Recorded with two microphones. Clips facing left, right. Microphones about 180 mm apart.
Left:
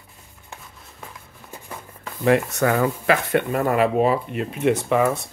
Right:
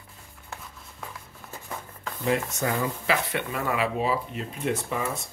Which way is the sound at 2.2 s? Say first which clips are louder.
Left 8 dB; 70° left (ahead or behind).